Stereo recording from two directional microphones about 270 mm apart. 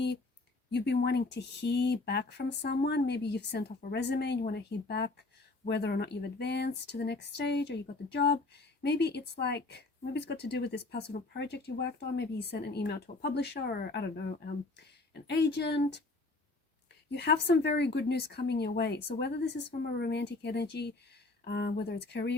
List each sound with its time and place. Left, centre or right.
0.7 s speech: left
17.1 s speech: left